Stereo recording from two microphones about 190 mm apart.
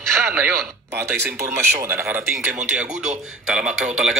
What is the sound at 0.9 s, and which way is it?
A man's voice, 15° right (ahead or behind).